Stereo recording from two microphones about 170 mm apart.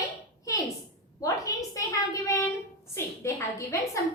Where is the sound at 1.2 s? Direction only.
20° left (ahead or behind).